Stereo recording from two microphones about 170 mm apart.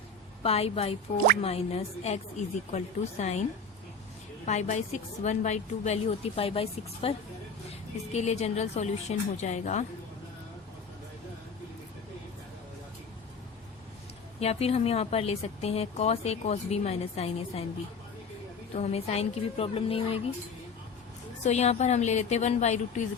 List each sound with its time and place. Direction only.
0.4 s speech: 35° left (ahead or behind)
4.4 s speech: 45° left (ahead or behind)
8.1 s speech: 40° left (ahead or behind)
14.3 s speech: 35° left (ahead or behind)
18.7 s speech: 40° left (ahead or behind)
21.4 s speech: 40° left (ahead or behind)